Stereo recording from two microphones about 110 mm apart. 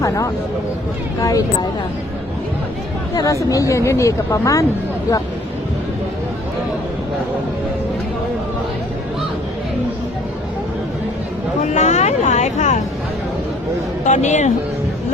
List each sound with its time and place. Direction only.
1.2 s speech: 30° left (ahead or behind)
3.5 s speech: 30° left (ahead or behind)
11.6 s speech: 90° left
14.0 s speech: 90° left